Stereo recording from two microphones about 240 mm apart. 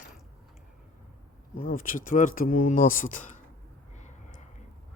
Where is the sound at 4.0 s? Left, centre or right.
Left.